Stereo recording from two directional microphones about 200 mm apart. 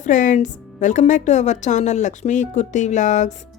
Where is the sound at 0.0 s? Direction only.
40° left (ahead or behind).